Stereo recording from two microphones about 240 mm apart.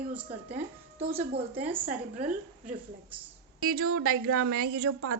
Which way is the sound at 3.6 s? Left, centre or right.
Right.